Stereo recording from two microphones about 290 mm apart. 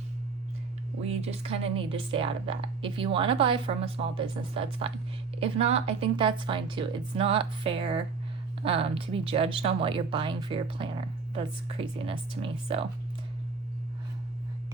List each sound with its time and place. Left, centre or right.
1.0 s a woman's voice: right